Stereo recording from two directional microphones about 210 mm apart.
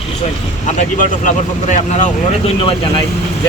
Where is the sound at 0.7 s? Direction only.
35° left (ahead or behind).